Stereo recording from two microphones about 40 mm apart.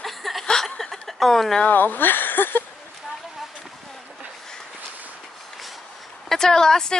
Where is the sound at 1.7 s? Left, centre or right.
Left.